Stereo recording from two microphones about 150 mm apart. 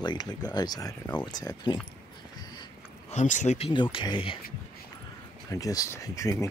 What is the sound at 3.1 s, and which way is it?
Speech, 55° left (ahead or behind).